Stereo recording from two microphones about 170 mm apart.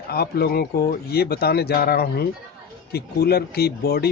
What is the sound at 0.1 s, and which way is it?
Speech, 65° left (ahead or behind).